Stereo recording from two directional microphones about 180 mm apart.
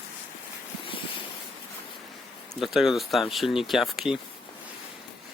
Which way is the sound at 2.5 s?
Centre (ahead or behind).